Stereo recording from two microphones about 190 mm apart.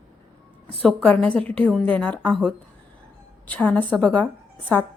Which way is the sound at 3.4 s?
10° left (ahead or behind).